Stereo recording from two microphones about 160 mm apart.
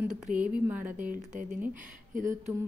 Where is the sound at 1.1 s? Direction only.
60° right (ahead or behind).